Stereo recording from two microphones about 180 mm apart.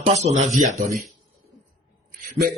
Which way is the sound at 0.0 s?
40° right (ahead or behind).